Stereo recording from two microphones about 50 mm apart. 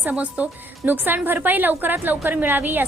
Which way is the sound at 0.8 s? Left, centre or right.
Right.